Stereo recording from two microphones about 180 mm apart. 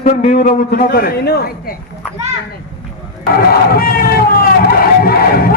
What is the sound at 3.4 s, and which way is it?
Speech, 55° left (ahead or behind).